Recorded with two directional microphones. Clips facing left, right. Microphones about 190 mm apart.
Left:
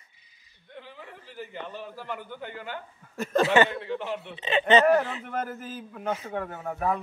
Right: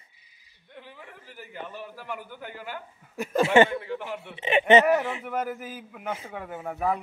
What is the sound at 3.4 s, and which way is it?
Speech, 25° right (ahead or behind).